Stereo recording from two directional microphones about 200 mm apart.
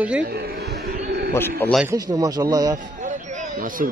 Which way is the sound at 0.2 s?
50° right (ahead or behind).